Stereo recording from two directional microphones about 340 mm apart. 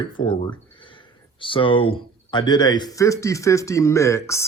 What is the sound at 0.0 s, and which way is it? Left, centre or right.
Speech, centre.